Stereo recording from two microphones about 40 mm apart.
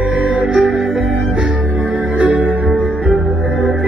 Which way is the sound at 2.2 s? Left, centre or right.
Right.